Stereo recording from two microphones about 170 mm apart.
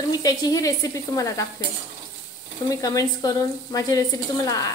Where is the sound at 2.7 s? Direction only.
20° left (ahead or behind).